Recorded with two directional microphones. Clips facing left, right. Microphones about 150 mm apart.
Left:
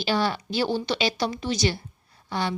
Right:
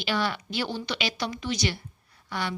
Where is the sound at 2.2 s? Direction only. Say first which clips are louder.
Left 4 dB; 30° left (ahead or behind).